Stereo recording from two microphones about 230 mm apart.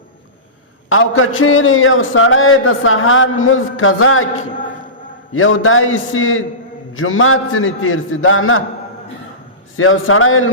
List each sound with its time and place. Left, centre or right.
0.9 s a man's voice: left
9.7 s a man's voice: left